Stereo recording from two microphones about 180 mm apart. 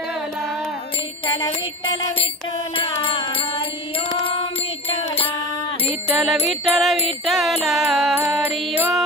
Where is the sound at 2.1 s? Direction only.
30° left (ahead or behind).